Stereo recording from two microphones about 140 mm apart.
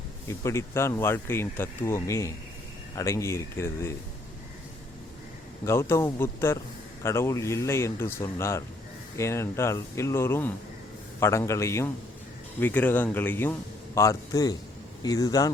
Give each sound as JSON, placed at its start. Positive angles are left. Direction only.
{"t": 0.3, "sound": "speech", "side_deg": 20}
{"t": 5.6, "sound": "speech", "side_deg": 20}